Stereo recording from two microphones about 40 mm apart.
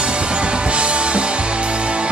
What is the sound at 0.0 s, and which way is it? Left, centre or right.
Music, right.